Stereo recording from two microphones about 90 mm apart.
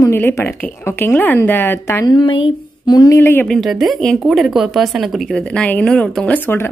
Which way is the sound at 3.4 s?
5° left (ahead or behind).